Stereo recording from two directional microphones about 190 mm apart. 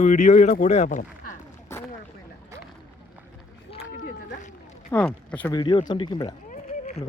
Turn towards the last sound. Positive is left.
turn(degrees=40)  # may be behind; listen again after turning